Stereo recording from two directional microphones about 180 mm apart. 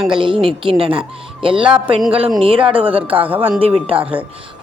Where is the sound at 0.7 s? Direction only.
30° right (ahead or behind).